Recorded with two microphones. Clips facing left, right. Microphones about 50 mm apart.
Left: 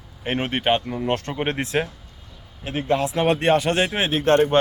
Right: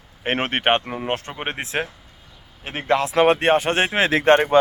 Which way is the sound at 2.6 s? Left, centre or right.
Right.